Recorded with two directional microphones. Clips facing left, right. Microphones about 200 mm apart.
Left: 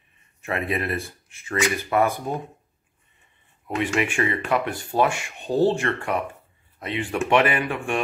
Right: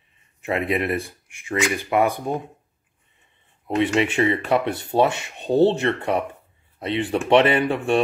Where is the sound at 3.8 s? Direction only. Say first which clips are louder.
Right 4 dB; 20° right (ahead or behind).